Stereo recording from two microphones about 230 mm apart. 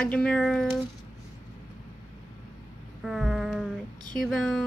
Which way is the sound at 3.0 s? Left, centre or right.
Centre.